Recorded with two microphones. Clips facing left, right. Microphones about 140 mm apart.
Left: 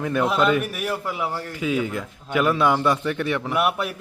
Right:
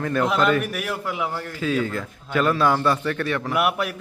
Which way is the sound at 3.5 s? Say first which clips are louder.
Right 1 dB; centre (ahead or behind).